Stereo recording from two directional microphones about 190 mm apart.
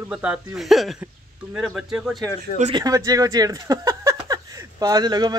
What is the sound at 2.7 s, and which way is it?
Speech, 20° right (ahead or behind).